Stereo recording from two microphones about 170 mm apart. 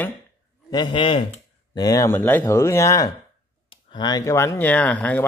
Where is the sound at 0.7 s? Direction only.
25° left (ahead or behind).